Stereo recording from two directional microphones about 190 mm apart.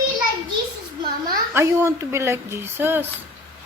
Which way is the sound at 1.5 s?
15° right (ahead or behind).